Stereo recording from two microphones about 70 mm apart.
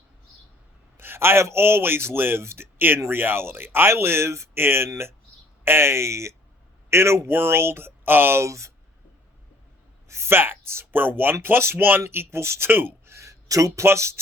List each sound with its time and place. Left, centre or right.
0.9 s a man's voice: right
10.1 s a man's voice: right
13.1 s speech: right